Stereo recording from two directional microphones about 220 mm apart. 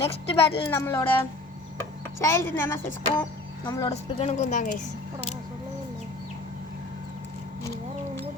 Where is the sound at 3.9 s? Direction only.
30° left (ahead or behind).